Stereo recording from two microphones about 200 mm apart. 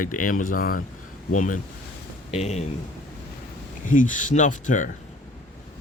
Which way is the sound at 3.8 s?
40° left (ahead or behind).